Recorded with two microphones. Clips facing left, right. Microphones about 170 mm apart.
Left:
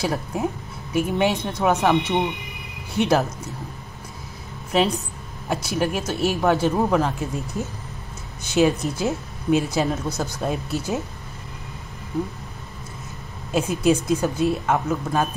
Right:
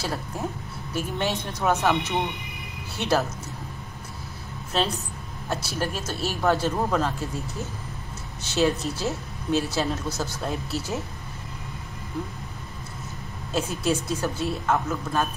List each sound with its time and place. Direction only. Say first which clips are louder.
0.0 s speech: left 6 dB; 15° left (ahead or behind)
5.5 s speech: left 5 dB; 15° left (ahead or behind)
8.5 s speech: left 4 dB; 15° left (ahead or behind)
13.5 s speech: left 6 dB; 20° left (ahead or behind)